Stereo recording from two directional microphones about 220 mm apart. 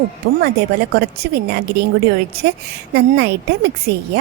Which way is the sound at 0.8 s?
45° right (ahead or behind).